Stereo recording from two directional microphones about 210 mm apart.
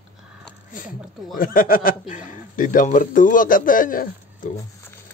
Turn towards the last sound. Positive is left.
turn(degrees=40)  # may be behind; listen again after turning